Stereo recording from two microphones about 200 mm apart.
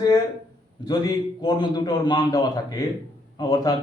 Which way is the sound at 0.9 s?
20° left (ahead or behind).